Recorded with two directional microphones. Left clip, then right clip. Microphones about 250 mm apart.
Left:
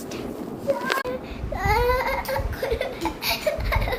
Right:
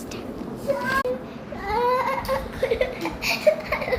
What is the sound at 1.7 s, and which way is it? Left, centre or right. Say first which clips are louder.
Baby cry: even; centre.